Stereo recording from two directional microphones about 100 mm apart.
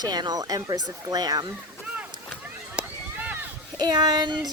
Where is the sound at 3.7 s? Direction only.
45° right (ahead or behind).